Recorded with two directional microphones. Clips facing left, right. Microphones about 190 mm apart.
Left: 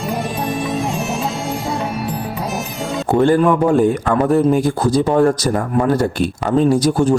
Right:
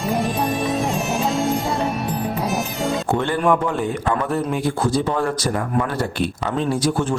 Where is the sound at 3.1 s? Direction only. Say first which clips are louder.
Left 8 dB; 40° left (ahead or behind).